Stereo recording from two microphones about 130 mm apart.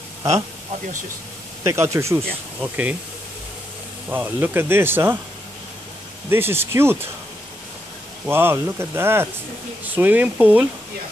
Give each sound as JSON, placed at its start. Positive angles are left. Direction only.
{"t": 1.6, "sound": "speech", "side_deg": -20}
{"t": 4.1, "sound": "speech", "side_deg": -15}
{"t": 6.3, "sound": "speech", "side_deg": -15}
{"t": 8.3, "sound": "speech", "side_deg": -20}